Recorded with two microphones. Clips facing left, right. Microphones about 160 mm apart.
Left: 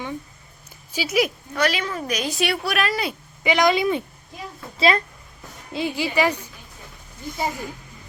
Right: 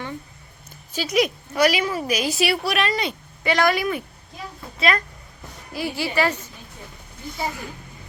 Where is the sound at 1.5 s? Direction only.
10° right (ahead or behind).